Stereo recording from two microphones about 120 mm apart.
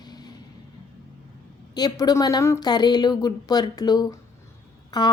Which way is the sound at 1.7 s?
35° left (ahead or behind).